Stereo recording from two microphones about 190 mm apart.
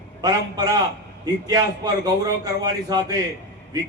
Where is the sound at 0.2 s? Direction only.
20° right (ahead or behind).